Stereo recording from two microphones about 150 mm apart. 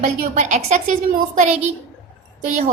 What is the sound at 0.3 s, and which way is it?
Speech, 50° right (ahead or behind).